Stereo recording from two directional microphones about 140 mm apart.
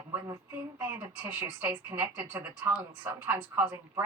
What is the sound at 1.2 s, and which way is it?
Speech, 10° right (ahead or behind).